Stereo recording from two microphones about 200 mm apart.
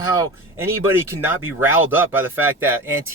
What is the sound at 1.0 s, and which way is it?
Speech, 10° right (ahead or behind).